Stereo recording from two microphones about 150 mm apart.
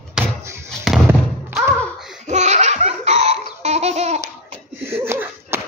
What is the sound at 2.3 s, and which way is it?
Laughter, 50° right (ahead or behind).